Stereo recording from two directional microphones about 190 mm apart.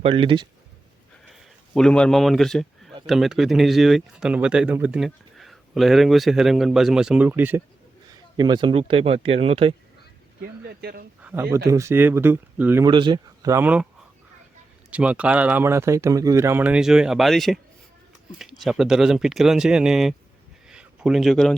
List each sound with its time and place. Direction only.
0.0 s speech: 30° right (ahead or behind)
1.3 s a sound: centre (ahead or behind)
3.1 s speech: centre (ahead or behind)
8.4 s speech: 25° right (ahead or behind)
10.4 s speech: 55° right (ahead or behind)
11.2 s speech: 10° right (ahead or behind)
12.9 s speech: 25° right (ahead or behind)
14.8 s speech: 5° right (ahead or behind)
20.7 s a sound: 5° right (ahead or behind)